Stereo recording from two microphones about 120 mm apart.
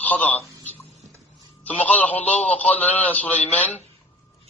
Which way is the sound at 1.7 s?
15° left (ahead or behind).